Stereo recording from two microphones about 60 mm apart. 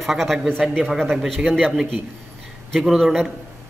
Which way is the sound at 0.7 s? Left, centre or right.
Centre.